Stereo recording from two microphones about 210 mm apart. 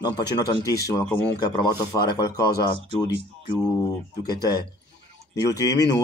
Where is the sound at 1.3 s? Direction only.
20° left (ahead or behind).